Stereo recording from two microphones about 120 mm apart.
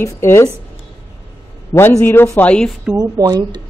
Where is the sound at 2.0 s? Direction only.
20° left (ahead or behind).